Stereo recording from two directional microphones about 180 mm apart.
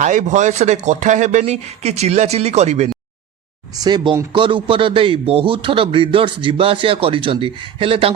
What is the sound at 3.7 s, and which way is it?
Speech, 25° right (ahead or behind).